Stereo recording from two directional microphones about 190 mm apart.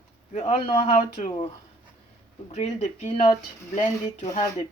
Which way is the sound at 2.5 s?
35° left (ahead or behind).